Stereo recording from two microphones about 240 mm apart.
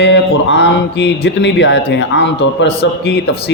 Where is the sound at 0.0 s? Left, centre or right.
Left.